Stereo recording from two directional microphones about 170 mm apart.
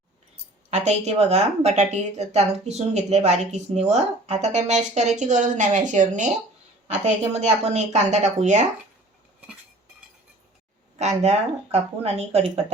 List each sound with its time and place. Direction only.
0.7 s speech: 40° right (ahead or behind)
11.2 s speech: 40° right (ahead or behind)